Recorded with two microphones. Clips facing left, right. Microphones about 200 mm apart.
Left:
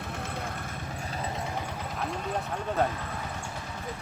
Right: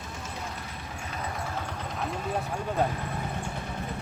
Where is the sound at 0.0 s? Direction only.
60° left (ahead or behind).